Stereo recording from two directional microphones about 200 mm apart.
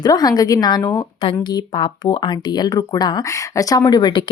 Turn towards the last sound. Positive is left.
turn(degrees=20)  # may be behind; listen again after turning